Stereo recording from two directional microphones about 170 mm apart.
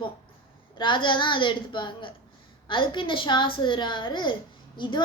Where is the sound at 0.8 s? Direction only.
30° left (ahead or behind).